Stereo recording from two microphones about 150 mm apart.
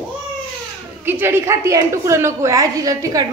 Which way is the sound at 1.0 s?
15° right (ahead or behind).